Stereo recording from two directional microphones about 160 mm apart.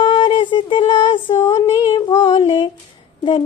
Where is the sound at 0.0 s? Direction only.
30° left (ahead or behind).